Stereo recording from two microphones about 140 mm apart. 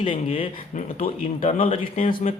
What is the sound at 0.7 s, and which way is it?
Speech, 65° left (ahead or behind).